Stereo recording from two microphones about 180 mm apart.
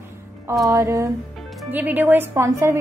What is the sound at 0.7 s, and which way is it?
A woman's voice, 20° right (ahead or behind).